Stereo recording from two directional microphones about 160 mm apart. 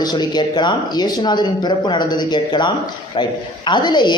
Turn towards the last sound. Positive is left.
turn(degrees=25)  # may be behind; listen again after turning